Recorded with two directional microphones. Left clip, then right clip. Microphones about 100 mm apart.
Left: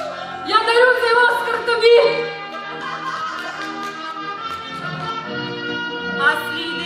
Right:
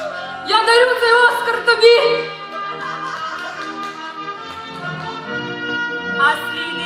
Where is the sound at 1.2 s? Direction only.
40° right (ahead or behind).